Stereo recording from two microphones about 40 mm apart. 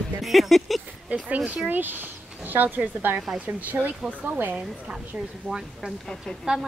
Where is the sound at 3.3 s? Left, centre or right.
Right.